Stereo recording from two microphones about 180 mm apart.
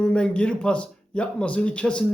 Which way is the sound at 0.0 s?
5° left (ahead or behind).